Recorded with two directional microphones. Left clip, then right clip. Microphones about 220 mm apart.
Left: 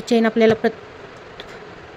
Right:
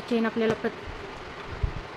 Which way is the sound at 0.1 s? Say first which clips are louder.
Left 10 dB; 35° left (ahead or behind).